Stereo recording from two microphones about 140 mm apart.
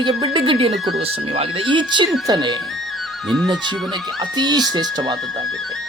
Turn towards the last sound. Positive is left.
turn(degrees=-30)  # may be behind; listen again after turning